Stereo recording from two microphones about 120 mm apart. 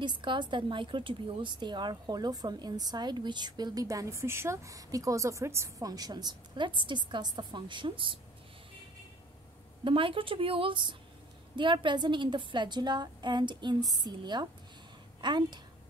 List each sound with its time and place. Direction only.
0.0 s a woman's voice: 40° right (ahead or behind)
9.8 s a woman's voice: 45° right (ahead or behind)